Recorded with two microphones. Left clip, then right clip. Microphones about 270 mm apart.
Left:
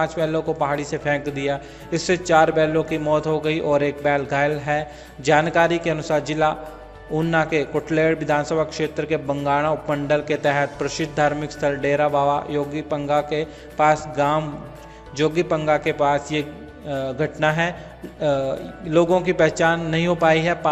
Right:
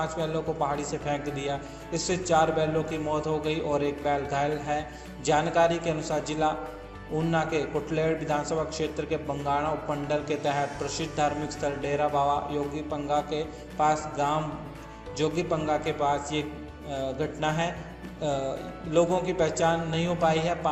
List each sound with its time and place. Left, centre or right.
0.0 s a man's voice: left